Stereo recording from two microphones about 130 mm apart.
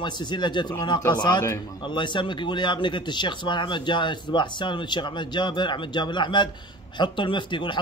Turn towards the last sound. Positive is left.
turn(degrees=40)  # may be behind; listen again after turning